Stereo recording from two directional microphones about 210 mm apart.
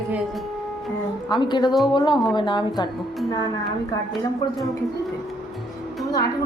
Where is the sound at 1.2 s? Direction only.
20° left (ahead or behind).